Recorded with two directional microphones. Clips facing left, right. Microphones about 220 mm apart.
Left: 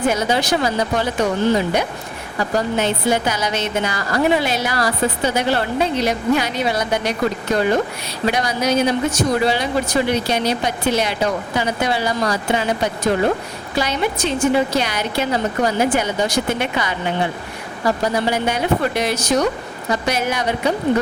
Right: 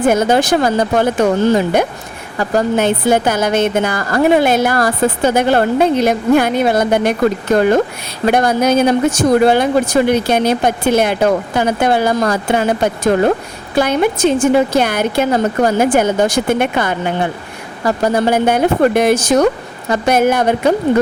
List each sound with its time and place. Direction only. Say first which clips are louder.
0.0 s speech: right 6 dB; 50° right (ahead or behind)